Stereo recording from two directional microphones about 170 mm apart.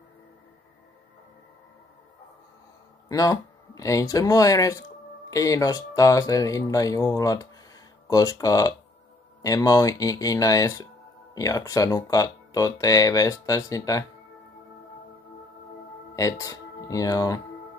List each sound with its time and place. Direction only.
3.1 s speech: 20° left (ahead or behind)
16.2 s speech: 20° left (ahead or behind)